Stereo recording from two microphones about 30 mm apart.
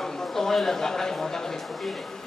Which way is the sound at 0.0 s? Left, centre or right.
Centre.